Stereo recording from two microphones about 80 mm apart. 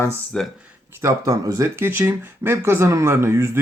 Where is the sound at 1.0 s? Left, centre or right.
Right.